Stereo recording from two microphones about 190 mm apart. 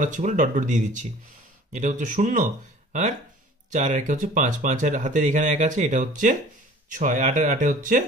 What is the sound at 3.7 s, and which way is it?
Speech, 40° right (ahead or behind).